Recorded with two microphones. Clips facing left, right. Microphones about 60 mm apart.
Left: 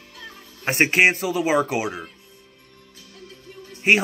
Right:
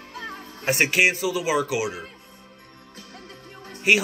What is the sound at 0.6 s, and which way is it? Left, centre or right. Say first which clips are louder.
Speech: left 3 dB; left.